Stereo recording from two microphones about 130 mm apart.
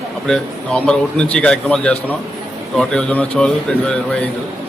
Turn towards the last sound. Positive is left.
turn(degrees=10)  # may be behind; listen again after turning